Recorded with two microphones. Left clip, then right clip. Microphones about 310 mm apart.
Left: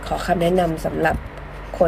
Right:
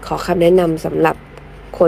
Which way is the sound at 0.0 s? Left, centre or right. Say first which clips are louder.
Right 5 dB; centre.